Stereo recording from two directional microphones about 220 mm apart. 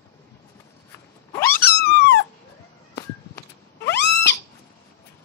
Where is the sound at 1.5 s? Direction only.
45° left (ahead or behind).